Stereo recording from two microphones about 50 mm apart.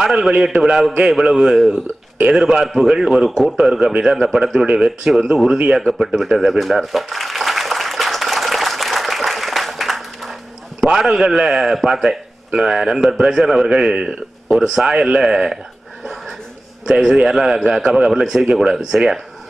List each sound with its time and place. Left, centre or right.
0.0 s a man's voice: centre
2.7 s a man's voice: centre
3.5 s a man's voice: centre
5.7 s a sound: centre
10.8 s a man's voice: centre
16.8 s a man's voice: centre